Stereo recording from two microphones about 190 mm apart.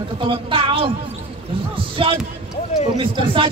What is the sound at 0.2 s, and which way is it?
Speech, 30° right (ahead or behind).